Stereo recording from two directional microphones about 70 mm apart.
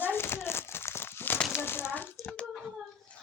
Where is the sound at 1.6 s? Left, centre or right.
Left.